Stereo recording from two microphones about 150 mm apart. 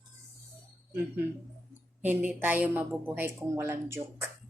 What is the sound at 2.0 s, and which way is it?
A woman's voice, 10° right (ahead or behind).